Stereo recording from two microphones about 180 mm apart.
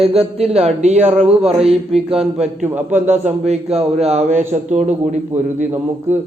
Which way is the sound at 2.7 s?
10° right (ahead or behind).